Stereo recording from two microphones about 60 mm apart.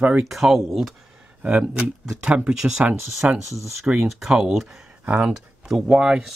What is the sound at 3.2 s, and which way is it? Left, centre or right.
Speech, right.